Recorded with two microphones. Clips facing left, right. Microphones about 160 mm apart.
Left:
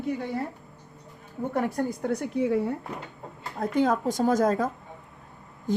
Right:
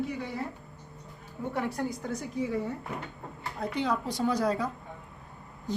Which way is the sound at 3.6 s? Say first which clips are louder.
Left 6 dB; 45° left (ahead or behind).